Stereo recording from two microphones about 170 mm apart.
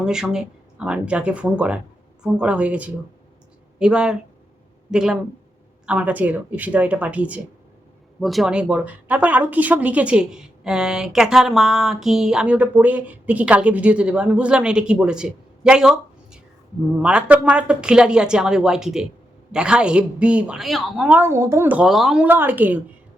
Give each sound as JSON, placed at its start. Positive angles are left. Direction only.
{"t": 0.0, "sound": "speech", "side_deg": -5}